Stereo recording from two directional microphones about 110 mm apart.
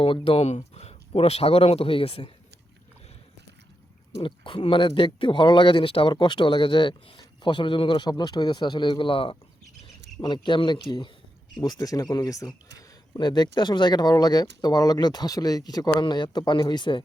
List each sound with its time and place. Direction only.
0.0 s speech: 55° left (ahead or behind)
4.2 s speech: 50° left (ahead or behind)
11.6 s speech: 35° left (ahead or behind)